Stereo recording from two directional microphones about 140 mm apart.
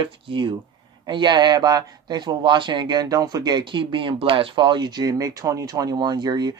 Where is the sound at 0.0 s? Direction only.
35° right (ahead or behind).